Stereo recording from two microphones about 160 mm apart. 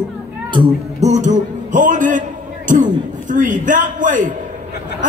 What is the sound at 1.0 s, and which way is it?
A man's voice, 45° right (ahead or behind).